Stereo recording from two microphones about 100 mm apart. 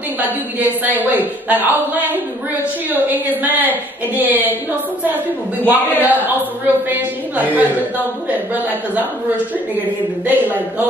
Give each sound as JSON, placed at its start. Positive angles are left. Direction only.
{"t": 0.2, "sound": "a woman's voice", "side_deg": -15}
{"t": 5.7, "sound": "a woman's voice", "side_deg": -20}
{"t": 9.8, "sound": "a woman's voice", "side_deg": -15}